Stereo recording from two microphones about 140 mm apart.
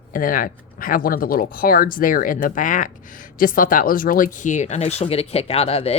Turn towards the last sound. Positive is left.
turn(degrees=45)  # may be behind; listen again after turning